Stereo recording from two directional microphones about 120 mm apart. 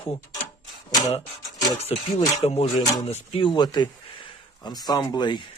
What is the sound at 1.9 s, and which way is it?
Speech, 60° left (ahead or behind).